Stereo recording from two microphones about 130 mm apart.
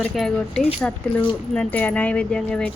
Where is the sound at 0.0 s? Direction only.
Centre (ahead or behind).